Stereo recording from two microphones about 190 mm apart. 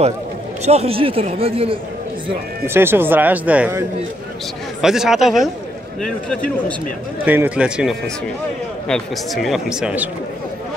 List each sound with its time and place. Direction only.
0.7 s a man's voice: 30° right (ahead or behind)
2.6 s speech: 10° right (ahead or behind)
4.8 s speech: centre (ahead or behind)
7.2 s speech: 10° right (ahead or behind)